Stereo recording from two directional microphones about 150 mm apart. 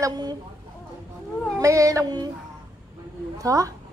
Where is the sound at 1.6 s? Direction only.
20° right (ahead or behind).